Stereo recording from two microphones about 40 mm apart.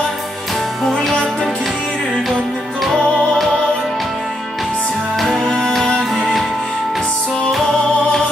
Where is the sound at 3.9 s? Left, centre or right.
Centre.